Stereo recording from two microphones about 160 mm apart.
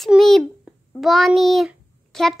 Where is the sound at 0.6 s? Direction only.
Centre (ahead or behind).